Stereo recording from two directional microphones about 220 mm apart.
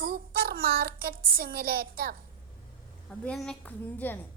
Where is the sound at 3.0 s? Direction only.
5° left (ahead or behind).